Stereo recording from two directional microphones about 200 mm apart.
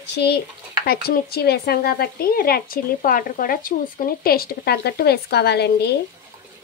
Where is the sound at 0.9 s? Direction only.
50° left (ahead or behind).